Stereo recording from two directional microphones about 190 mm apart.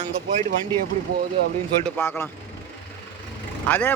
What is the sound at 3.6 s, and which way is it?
Speech, 10° left (ahead or behind).